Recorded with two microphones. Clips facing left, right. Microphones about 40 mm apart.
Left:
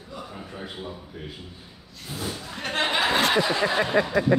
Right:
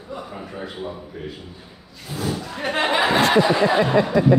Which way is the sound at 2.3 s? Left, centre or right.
Centre.